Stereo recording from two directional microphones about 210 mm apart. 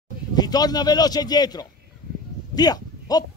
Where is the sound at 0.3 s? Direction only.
20° left (ahead or behind).